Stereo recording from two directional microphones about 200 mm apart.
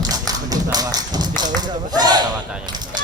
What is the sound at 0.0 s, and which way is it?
Tap, 20° right (ahead or behind).